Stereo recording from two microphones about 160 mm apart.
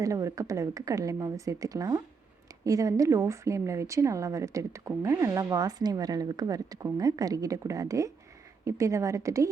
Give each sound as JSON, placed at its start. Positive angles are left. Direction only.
{"t": 0.0, "sound": "speech", "side_deg": -20}